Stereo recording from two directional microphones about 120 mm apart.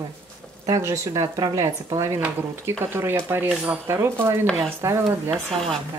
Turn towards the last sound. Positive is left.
turn(degrees=5)  # may be behind; listen again after turning